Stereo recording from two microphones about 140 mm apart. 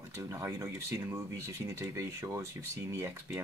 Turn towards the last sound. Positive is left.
turn(degrees=-15)  # may be behind; listen again after turning